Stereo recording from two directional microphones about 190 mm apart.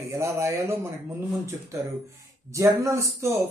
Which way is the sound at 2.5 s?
15° right (ahead or behind).